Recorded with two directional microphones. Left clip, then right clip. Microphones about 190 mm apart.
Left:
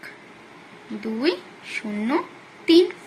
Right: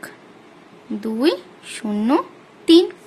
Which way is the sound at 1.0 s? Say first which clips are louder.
Right 4 dB; 50° right (ahead or behind).